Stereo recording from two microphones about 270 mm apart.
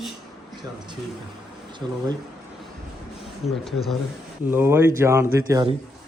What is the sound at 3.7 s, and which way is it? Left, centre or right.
A man's voice, centre.